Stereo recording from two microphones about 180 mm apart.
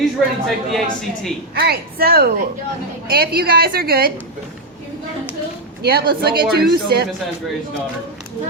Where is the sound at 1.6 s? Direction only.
60° right (ahead or behind).